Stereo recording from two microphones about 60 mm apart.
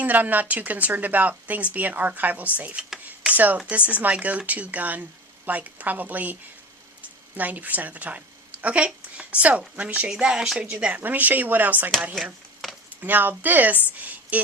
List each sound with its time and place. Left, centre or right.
0.0 s speech: right
7.3 s a woman's voice: right
10.1 s speech: centre
11.0 s speech: right
12.1 s a sound: centre
13.0 s speech: right